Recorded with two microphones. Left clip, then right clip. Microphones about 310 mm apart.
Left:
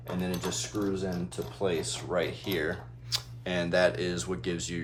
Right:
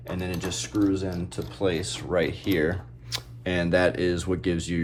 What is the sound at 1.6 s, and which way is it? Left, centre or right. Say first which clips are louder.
Speech: right 4 dB; right.